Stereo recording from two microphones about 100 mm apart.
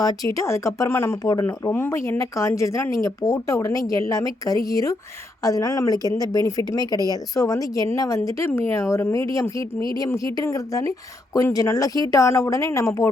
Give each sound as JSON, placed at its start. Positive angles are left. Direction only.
{"t": 0.0, "sound": "speech", "side_deg": 40}